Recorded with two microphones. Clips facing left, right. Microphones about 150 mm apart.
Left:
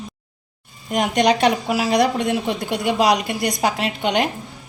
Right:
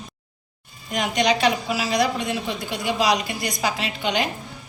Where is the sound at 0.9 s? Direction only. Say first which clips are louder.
Left 4 dB; 55° left (ahead or behind).